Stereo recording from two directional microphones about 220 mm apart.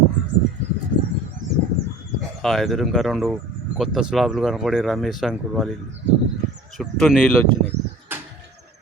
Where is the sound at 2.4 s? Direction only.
Centre (ahead or behind).